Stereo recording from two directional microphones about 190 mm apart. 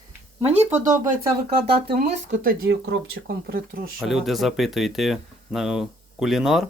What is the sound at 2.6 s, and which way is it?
Speech, 80° right.